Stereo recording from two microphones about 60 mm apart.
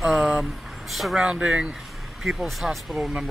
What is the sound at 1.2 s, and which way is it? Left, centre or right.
Speech, centre.